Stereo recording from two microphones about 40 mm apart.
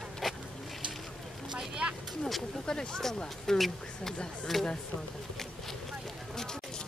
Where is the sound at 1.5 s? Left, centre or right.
Right.